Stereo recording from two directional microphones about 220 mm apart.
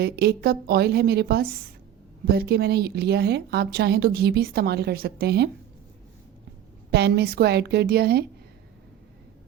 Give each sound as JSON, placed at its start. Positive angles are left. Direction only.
{"t": 0.0, "sound": "a woman's voice", "side_deg": -45}
{"t": 6.9, "sound": "a woman's voice", "side_deg": -45}